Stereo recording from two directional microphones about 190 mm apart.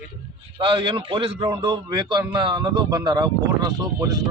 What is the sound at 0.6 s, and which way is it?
Speech, 25° right (ahead or behind).